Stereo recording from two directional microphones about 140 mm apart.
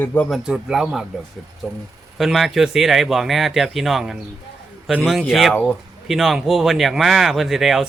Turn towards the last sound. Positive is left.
turn(degrees=0)  # may be behind; listen again after turning